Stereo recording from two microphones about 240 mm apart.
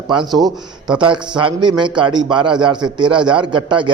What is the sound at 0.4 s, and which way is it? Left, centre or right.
Speech, centre.